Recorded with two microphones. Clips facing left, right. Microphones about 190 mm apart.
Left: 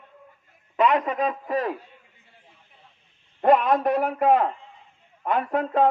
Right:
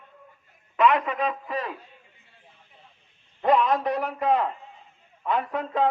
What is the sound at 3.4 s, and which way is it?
A man's voice, 55° left (ahead or behind).